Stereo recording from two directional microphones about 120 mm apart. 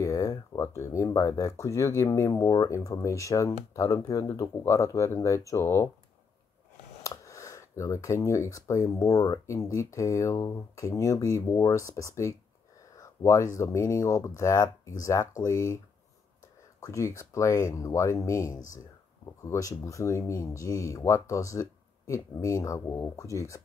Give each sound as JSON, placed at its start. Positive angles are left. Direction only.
{"t": 0.0, "sound": "speech", "side_deg": 30}
{"t": 7.0, "sound": "speech", "side_deg": 25}
{"t": 16.8, "sound": "speech", "side_deg": 30}